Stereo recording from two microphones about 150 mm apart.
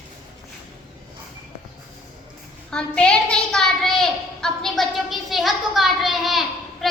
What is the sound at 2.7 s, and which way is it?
A child's voice, 5° left (ahead or behind).